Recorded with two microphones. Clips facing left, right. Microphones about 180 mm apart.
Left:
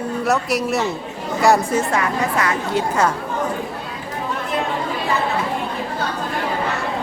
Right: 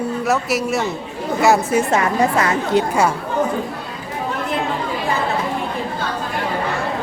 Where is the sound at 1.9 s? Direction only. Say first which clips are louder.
Right 4 dB; 25° right (ahead or behind).